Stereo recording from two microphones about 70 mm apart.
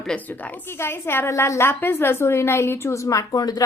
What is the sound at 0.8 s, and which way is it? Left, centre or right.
A woman's voice, left.